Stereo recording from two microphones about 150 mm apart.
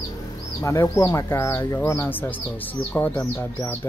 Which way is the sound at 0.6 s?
20° left (ahead or behind).